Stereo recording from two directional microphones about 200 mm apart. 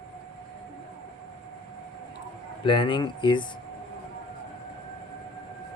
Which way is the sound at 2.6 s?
25° left (ahead or behind).